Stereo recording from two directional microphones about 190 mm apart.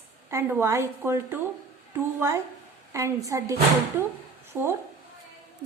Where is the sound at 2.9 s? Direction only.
15° right (ahead or behind).